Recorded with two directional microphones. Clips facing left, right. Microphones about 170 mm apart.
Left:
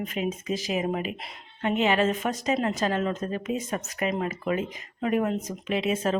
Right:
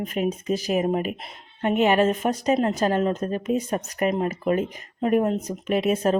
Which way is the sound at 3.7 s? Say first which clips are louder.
Right 4 dB; 50° right (ahead or behind).